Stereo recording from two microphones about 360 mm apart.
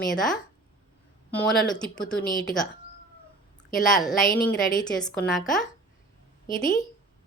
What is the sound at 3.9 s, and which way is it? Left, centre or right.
Speech, centre.